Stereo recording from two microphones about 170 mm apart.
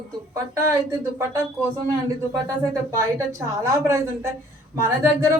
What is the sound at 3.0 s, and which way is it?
Speech, 20° right (ahead or behind).